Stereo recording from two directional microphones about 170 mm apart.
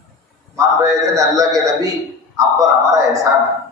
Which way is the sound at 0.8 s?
20° right (ahead or behind).